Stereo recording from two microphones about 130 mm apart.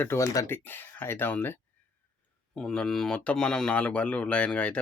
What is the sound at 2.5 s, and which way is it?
Speech, 5° left (ahead or behind).